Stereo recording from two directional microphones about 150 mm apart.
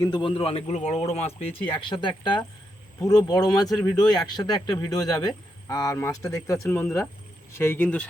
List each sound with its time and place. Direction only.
0.0 s a man's voice: 30° left (ahead or behind); by 8.0 s 10° left (ahead or behind)